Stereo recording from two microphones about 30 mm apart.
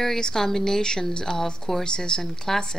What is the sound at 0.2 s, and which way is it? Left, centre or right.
Speech, centre.